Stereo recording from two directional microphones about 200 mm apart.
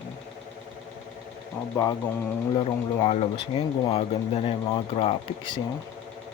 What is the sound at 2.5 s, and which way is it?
Speech, 25° left (ahead or behind).